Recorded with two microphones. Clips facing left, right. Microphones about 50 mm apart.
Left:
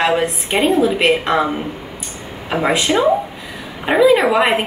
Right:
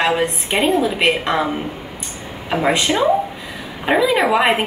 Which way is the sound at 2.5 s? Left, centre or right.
Centre.